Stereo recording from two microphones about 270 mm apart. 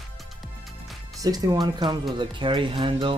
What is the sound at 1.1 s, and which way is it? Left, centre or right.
Speech, centre.